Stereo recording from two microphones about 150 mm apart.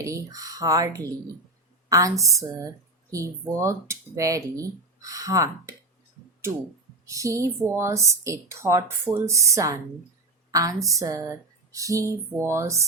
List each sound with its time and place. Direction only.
0.0 s speech: 20° right (ahead or behind)
7.0 s a woman's voice: 20° right (ahead or behind)